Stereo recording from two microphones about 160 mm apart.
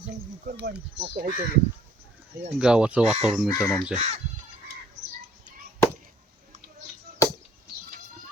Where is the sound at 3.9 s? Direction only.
45° right (ahead or behind).